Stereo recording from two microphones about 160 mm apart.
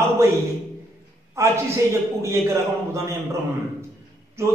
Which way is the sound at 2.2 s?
15° right (ahead or behind).